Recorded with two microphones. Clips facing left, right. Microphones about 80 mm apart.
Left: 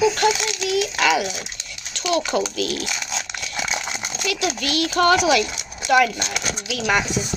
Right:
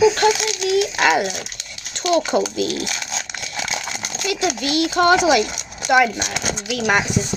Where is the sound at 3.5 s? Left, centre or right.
Left.